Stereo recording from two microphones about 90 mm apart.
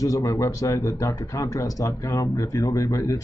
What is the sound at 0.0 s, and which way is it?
Speech, 40° left (ahead or behind).